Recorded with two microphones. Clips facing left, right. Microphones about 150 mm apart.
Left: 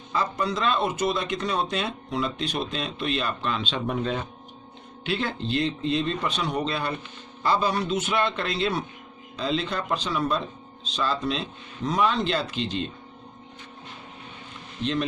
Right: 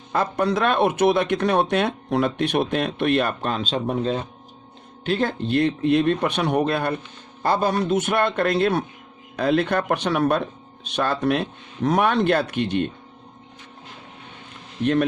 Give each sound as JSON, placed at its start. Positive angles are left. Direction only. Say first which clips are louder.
{"t": 0.1, "sound": "speech", "louder": "right 5 dB", "side_deg": -60}
{"t": 5.0, "sound": "a man's voice", "louder": "right 5 dB", "side_deg": -45}